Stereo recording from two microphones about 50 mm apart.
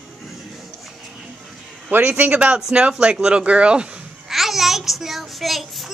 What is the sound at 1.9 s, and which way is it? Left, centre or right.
Speech, right.